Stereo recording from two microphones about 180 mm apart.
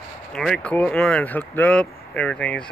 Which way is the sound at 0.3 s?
5° left (ahead or behind).